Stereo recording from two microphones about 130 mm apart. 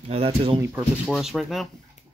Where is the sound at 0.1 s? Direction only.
50° right (ahead or behind).